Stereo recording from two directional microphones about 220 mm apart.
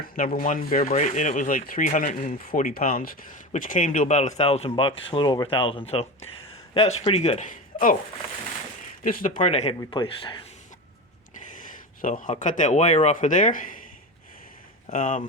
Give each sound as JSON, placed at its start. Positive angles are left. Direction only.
{"t": 0.0, "sound": "speech", "side_deg": 40}
{"t": 9.0, "sound": "speech", "side_deg": 40}
{"t": 12.0, "sound": "speech", "side_deg": 35}
{"t": 14.9, "sound": "speech", "side_deg": 35}